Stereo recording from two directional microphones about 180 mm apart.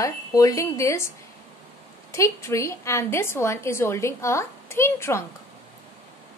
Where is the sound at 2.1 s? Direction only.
15° left (ahead or behind).